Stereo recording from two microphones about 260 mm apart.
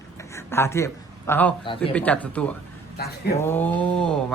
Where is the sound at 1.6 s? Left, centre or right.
Centre.